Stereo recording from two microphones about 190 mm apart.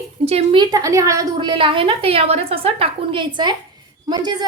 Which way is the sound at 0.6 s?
20° right (ahead or behind).